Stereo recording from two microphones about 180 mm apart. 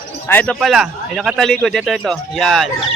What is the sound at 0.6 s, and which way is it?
Speech, centre (ahead or behind).